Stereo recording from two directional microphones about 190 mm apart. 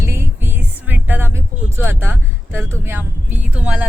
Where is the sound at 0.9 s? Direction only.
10° right (ahead or behind).